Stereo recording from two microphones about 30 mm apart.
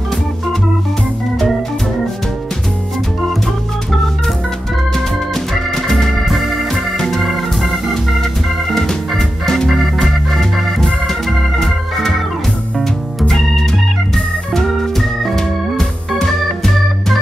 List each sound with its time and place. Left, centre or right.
4.9 s organ: centre
6.2 s organ: centre
6.7 s organ: centre
9.5 s music: centre
10.0 s organ: centre
13.3 s organ: centre